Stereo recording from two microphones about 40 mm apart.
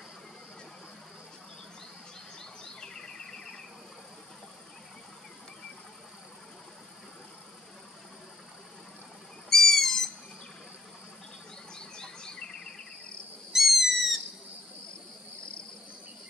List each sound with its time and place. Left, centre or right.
2.3 s a sound: centre
9.5 s owl: centre
11.7 s insect: centre
13.5 s owl: centre